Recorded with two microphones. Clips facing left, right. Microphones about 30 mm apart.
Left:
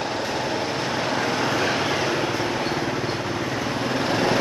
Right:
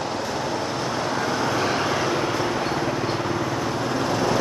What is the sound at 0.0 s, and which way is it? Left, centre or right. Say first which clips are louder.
Vehicle: left 1 dB; left.